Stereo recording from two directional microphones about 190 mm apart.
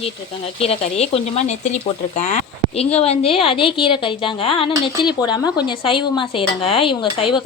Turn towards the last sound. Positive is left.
turn(degrees=30)  # may be behind; listen again after turning